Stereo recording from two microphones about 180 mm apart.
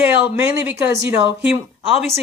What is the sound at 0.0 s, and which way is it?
Speech, 10° right (ahead or behind).